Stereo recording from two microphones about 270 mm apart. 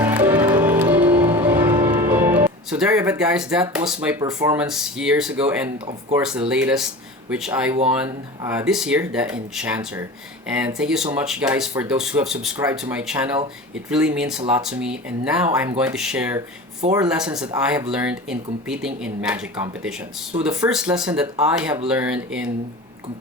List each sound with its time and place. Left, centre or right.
0.0 s music: centre
6.1 s speech: centre